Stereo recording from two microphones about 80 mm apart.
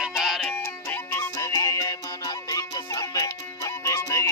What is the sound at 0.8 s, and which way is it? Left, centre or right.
Music, left.